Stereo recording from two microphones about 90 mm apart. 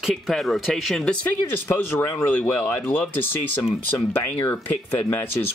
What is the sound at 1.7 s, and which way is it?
Speech, 30° left (ahead or behind).